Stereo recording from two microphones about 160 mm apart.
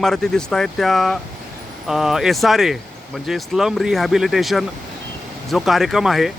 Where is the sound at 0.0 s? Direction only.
5° left (ahead or behind).